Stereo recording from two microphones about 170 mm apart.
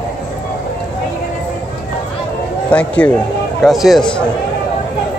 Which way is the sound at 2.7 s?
10° left (ahead or behind).